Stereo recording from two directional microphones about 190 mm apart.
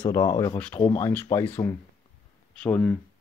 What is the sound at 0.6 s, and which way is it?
Speech, 10° left (ahead or behind).